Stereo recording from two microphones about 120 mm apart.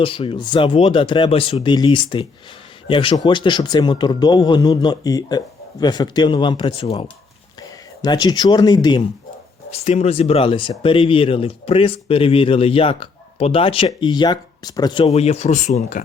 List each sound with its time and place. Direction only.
0.0 s speech: 50° left (ahead or behind)
6.7 s speech: 60° left (ahead or behind)
7.6 s speech: 35° left (ahead or behind)
9.7 s speech: 60° left (ahead or behind); by 15.0 s 35° left (ahead or behind)
15.0 s speech: 60° left (ahead or behind); by 16.0 s 80° left